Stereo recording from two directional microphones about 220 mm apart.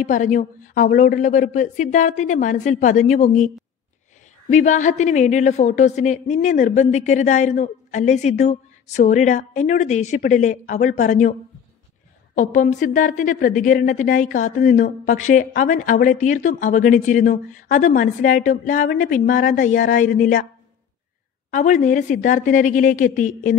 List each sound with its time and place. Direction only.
0.0 s a woman's voice: 35° left (ahead or behind)
12.4 s a woman's voice: 35° left (ahead or behind)
21.5 s a woman's voice: 35° left (ahead or behind)